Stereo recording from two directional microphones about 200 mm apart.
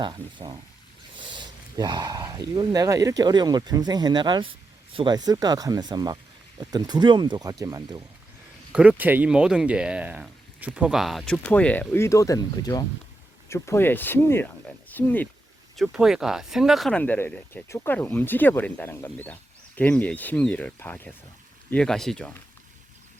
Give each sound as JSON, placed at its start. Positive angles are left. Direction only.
{"t": 0.0, "sound": "speech", "side_deg": -25}
{"t": 8.7, "sound": "speech", "side_deg": -5}